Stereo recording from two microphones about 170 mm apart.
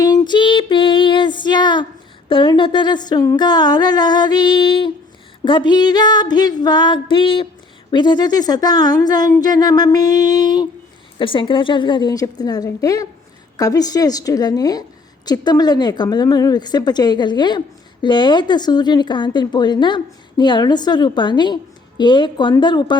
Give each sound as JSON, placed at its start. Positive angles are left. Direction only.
{"t": 0.0, "sound": "female singing", "side_deg": 25}
{"t": 2.3, "sound": "a woman's voice", "side_deg": 30}